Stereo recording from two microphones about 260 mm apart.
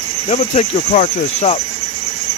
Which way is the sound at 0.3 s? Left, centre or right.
Left.